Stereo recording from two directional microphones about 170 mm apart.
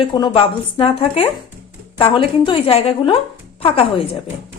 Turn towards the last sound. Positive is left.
turn(degrees=35)  # may be behind; listen again after turning